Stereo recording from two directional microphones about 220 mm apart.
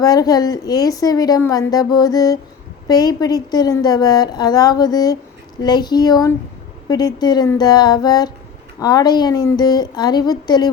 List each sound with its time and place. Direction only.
0.0 s a woman's voice: 15° left (ahead or behind)